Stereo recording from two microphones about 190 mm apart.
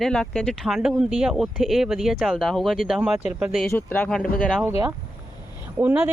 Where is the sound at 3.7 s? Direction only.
10° left (ahead or behind).